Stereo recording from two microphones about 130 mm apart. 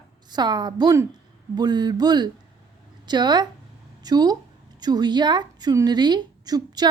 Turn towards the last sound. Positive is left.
turn(degrees=-30)  # may be behind; listen again after turning